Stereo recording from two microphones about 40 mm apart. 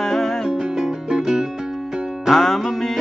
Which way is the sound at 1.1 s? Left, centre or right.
Centre.